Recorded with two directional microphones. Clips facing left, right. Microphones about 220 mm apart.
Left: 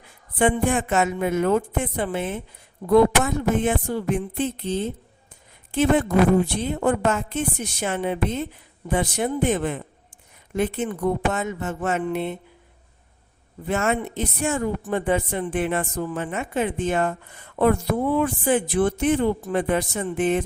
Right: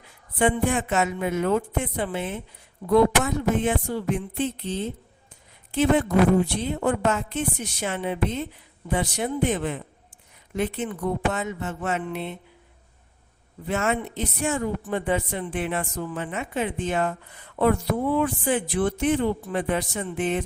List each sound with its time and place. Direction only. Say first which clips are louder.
0.3 s a woman's voice: left 2 dB; 50° left (ahead or behind)
13.7 s a woman's voice: left 2 dB; 50° left (ahead or behind)